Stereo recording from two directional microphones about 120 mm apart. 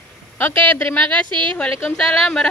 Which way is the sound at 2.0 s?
5° left (ahead or behind).